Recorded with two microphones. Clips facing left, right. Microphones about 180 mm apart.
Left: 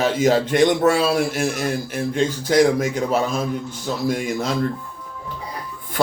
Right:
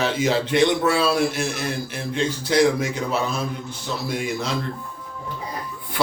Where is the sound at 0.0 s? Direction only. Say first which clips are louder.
Left 4 dB; 45° left (ahead or behind).